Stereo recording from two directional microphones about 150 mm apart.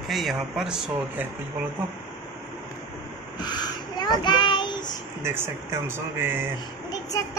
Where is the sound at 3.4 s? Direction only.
30° left (ahead or behind).